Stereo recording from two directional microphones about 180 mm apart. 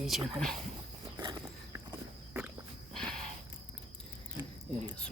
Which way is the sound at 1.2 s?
25° right (ahead or behind).